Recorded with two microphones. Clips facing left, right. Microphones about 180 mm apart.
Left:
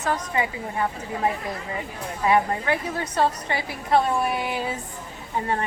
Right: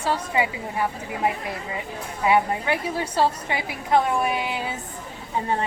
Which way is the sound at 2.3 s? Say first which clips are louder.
Even; 10° right (ahead or behind).